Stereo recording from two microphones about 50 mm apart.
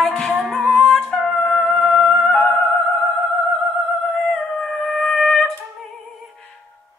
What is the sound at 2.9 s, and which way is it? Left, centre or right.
Music, left.